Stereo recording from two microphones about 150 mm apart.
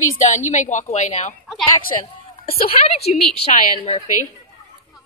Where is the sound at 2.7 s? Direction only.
45° left (ahead or behind).